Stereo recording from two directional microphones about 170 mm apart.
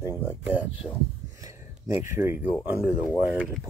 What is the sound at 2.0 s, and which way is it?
Speech, 15° right (ahead or behind).